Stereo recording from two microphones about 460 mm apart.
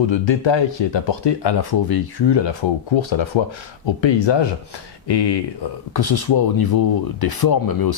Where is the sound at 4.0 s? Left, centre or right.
Left.